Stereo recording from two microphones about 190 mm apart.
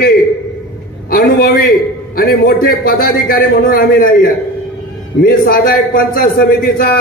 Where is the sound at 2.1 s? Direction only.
55° left (ahead or behind).